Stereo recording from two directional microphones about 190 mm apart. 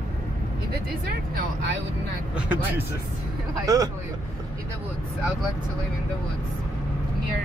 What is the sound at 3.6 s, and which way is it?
Speech, 20° right (ahead or behind).